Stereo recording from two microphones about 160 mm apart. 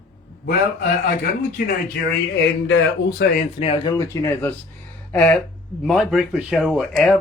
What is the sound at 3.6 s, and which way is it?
Speech, 35° left (ahead or behind).